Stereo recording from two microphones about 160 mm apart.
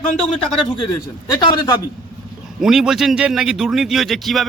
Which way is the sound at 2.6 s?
5° right (ahead or behind).